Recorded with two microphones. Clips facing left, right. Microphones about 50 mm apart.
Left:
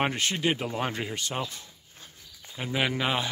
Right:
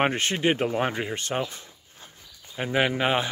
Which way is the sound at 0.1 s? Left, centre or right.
Right.